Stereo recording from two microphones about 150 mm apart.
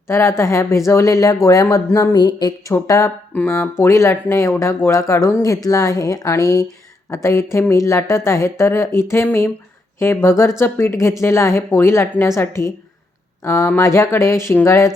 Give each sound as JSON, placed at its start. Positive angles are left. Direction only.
{"t": 0.1, "sound": "a woman's voice", "side_deg": 20}